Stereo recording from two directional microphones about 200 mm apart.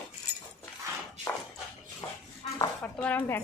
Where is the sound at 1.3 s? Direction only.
10° left (ahead or behind).